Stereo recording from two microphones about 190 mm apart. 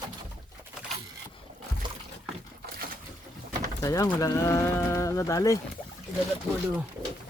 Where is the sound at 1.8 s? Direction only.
25° right (ahead or behind).